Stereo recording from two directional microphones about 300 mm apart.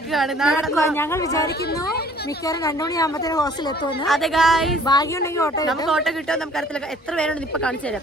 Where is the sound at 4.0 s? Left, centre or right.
Centre.